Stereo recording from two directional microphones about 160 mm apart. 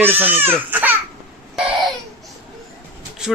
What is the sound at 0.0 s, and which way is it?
Speech, 10° right (ahead or behind).